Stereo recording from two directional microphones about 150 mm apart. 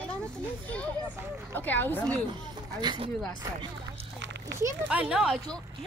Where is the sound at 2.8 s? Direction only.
35° right (ahead or behind).